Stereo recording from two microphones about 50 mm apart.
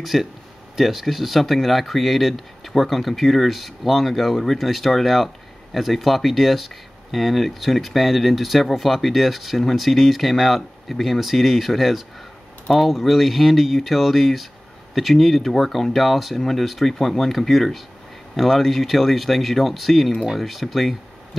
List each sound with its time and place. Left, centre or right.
0.0 s speech: centre